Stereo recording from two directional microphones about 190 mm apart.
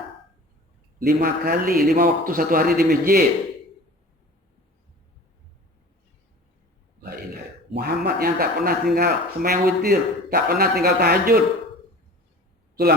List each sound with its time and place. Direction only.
0.9 s speech: 50° right (ahead or behind)
7.7 s speech: 55° right (ahead or behind)
12.8 s speech: 55° right (ahead or behind)